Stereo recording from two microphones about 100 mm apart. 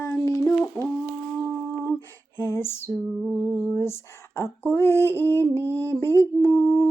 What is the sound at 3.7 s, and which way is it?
Speech, 25° left (ahead or behind).